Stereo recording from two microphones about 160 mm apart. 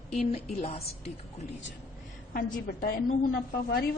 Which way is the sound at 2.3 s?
65° left (ahead or behind).